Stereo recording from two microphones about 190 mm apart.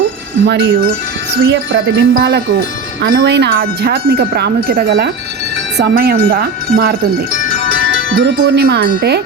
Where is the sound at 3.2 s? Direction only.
65° right (ahead or behind).